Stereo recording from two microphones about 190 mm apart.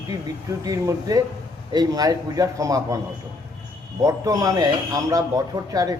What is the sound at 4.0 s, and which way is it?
A man's voice, 15° right (ahead or behind).